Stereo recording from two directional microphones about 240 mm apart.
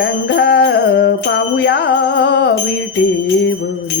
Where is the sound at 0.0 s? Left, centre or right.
Left.